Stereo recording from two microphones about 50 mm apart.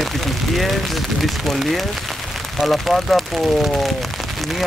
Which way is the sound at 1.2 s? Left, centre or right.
Centre.